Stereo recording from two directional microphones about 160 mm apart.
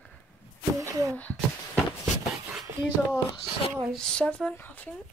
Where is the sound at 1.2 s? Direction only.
10° left (ahead or behind).